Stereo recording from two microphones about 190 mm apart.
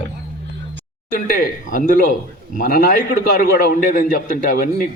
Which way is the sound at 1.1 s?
45° left (ahead or behind).